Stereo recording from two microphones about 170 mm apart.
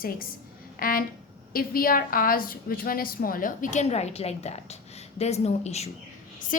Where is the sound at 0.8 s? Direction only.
55° left (ahead or behind); by 5.9 s 40° left (ahead or behind).